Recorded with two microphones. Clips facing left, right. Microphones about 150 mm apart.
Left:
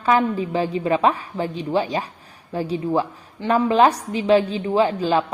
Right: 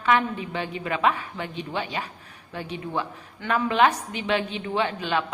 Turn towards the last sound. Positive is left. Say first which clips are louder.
# left 7 dB
turn(degrees=35)  # may be behind; listen again after turning